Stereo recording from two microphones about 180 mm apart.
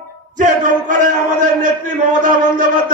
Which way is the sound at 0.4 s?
45° right (ahead or behind).